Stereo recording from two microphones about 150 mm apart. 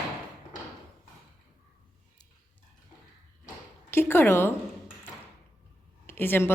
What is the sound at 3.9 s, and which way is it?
Speech, 15° left (ahead or behind).